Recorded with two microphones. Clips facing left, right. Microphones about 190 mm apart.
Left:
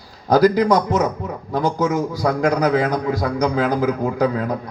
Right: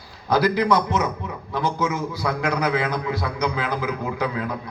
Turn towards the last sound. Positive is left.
turn(degrees=45)  # may be behind; listen again after turning